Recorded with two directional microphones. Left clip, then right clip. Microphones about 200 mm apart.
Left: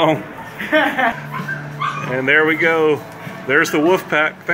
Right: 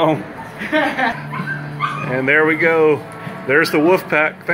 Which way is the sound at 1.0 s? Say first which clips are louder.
Left 1 dB; 25° left (ahead or behind).